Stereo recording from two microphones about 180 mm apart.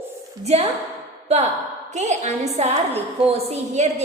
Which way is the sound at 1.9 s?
40° right (ahead or behind).